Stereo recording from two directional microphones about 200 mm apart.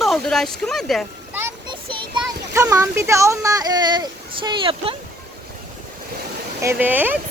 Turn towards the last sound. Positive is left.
turn(degrees=-10)  # may be behind; listen again after turning